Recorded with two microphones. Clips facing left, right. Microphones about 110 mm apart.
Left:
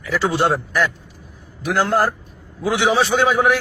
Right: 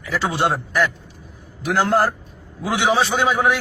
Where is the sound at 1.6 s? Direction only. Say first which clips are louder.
Even; 25° right (ahead or behind).